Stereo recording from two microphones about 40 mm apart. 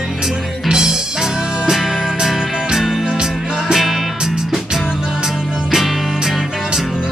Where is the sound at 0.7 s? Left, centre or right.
Centre.